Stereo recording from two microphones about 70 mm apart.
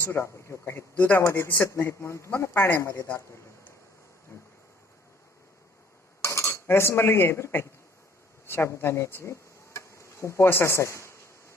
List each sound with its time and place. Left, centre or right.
0.0 s speech: left
0.9 s speech: left
1.2 s speech: left
4.3 s insect: left
6.2 s cutlery: left
8.4 s insect: left